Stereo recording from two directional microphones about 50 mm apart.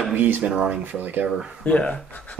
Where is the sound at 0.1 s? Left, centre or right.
Right.